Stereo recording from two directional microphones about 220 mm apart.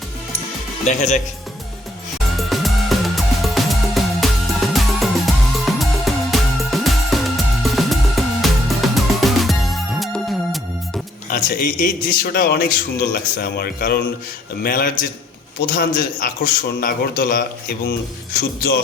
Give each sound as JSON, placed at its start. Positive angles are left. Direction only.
{"t": 0.9, "sound": "a man's voice", "side_deg": 30}
{"t": 2.5, "sound": "music", "side_deg": 0}
{"t": 11.3, "sound": "a man's voice", "side_deg": 35}